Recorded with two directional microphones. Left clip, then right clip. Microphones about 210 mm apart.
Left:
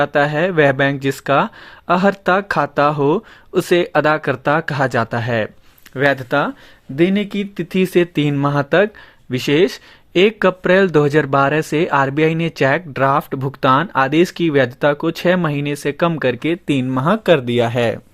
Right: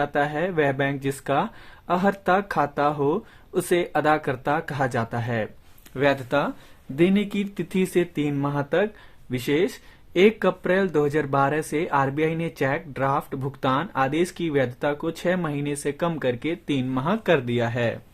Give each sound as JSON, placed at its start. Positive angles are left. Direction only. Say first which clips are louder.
{"t": 0.0, "sound": "speech", "louder": "left 8 dB", "side_deg": 25}